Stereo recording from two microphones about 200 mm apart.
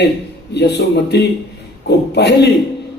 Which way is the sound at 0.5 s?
55° left (ahead or behind).